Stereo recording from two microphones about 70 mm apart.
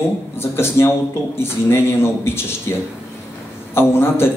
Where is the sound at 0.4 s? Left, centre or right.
Left.